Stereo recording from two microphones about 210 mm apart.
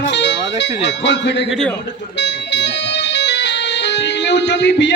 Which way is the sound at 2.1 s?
55° left (ahead or behind).